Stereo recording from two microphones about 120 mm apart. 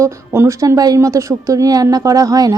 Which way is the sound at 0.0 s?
20° right (ahead or behind).